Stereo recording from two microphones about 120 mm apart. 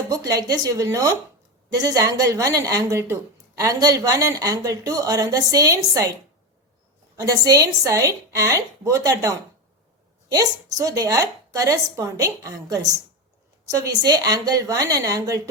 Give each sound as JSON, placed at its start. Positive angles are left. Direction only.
{"t": 0.1, "sound": "a woman's voice", "side_deg": -30}
{"t": 7.2, "sound": "a woman's voice", "side_deg": -30}
{"t": 10.3, "sound": "a woman's voice", "side_deg": -30}